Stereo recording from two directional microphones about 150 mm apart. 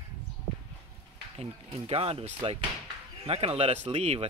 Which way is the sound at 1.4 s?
40° right (ahead or behind).